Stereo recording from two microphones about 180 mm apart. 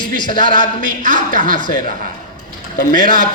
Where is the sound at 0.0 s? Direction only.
25° left (ahead or behind).